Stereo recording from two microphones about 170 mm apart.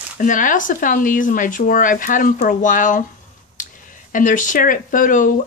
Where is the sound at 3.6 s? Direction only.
50° left (ahead or behind).